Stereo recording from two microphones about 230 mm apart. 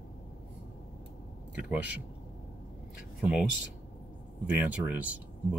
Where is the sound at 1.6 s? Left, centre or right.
Centre.